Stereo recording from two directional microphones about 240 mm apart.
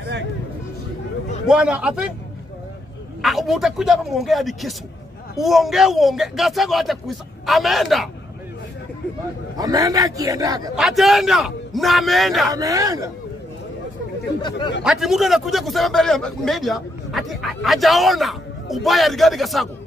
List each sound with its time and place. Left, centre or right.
1.5 s a man's voice: centre
3.2 s a man's voice: centre
9.6 s a man's voice: centre
10.8 s a man's voice: centre
12.4 s a man's voice: centre
14.8 s a man's voice: centre